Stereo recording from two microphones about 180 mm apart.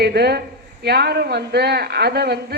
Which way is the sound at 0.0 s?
65° right (ahead or behind).